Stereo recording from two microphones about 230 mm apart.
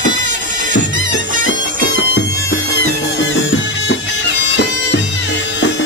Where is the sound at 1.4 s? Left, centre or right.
Left.